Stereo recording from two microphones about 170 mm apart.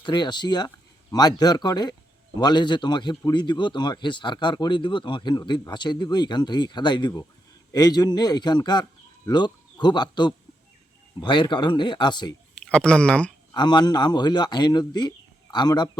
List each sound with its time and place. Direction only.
0.0 s a man's voice: 25° left (ahead or behind)
12.5 s speech: 5° left (ahead or behind)
13.5 s a man's voice: 25° left (ahead or behind)